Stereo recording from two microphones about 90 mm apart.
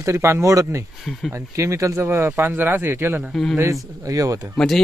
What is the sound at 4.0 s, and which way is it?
Speech, 40° right (ahead or behind).